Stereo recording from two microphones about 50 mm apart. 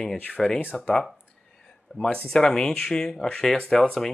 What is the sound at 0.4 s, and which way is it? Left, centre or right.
Speech, centre.